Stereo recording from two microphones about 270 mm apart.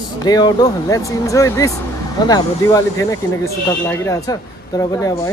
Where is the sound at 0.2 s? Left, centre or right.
Centre.